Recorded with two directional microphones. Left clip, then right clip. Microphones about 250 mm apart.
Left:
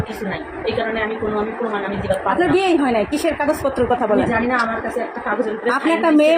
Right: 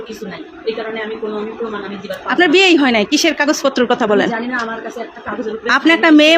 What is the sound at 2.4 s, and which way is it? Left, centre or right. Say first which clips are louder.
Speech: right 9 dB; right.